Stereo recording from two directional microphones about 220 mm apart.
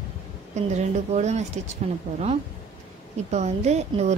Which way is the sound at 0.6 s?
30° right (ahead or behind).